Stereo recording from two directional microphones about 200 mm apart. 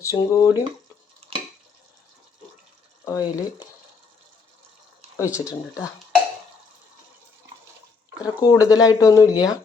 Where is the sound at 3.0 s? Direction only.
15° left (ahead or behind).